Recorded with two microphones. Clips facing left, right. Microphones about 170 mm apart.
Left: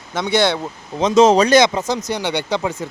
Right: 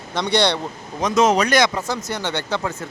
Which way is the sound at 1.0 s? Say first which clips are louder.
Left 5 dB; 25° left (ahead or behind).